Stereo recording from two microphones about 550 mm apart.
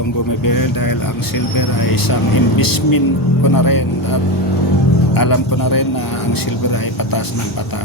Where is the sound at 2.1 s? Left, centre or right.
Left.